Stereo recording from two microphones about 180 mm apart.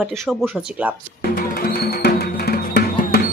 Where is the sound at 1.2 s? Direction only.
60° left (ahead or behind).